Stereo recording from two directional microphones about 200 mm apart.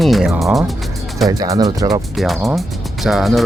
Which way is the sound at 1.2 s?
15° right (ahead or behind).